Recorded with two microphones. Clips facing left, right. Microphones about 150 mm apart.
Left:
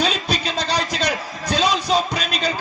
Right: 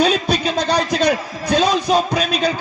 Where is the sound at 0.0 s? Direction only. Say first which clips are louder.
Right 6 dB; 55° right (ahead or behind).